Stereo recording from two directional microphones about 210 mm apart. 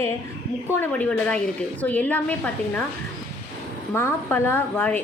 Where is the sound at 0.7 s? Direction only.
10° left (ahead or behind).